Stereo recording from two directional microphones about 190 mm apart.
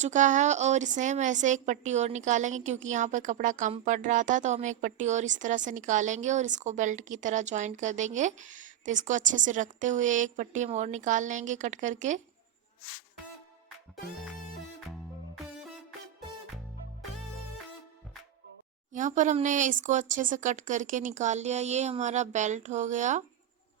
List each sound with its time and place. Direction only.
0.0 s a woman's voice: 40° right (ahead or behind)
18.9 s a woman's voice: 40° right (ahead or behind)